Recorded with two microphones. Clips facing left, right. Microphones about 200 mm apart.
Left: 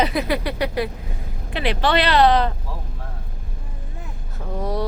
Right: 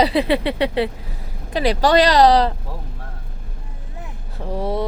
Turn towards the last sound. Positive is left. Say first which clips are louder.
# right 3 dB
turn(degrees=-30)  # may be behind; listen again after turning